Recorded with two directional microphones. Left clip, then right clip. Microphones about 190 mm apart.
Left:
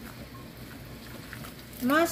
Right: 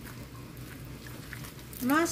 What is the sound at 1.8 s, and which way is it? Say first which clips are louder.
Speech: left 3 dB; 25° right (ahead or behind).